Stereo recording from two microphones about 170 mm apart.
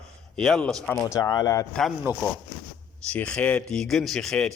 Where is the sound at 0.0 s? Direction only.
Centre (ahead or behind).